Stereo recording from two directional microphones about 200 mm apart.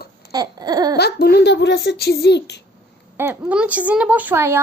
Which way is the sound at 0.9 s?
50° left (ahead or behind).